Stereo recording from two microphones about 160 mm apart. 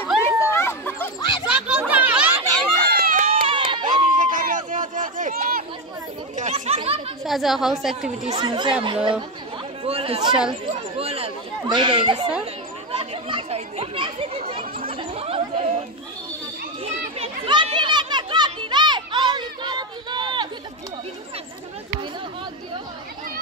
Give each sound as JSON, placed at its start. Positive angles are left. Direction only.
{"t": 0.2, "sound": "chatter", "side_deg": 15}
{"t": 1.2, "sound": "a sound", "side_deg": 30}
{"t": 1.7, "sound": "children playing", "side_deg": -10}
{"t": 2.8, "sound": "run", "side_deg": -75}
{"t": 3.4, "sound": "run", "side_deg": -30}
{"t": 4.1, "sound": "a sound", "side_deg": -55}
{"t": 6.3, "sound": "chatter", "side_deg": -45}
{"t": 7.2, "sound": "a woman's voice", "side_deg": 0}
{"t": 8.4, "sound": "speech", "side_deg": -30}
{"t": 14.9, "sound": "a sound", "side_deg": -35}
{"t": 17.2, "sound": "children playing", "side_deg": -35}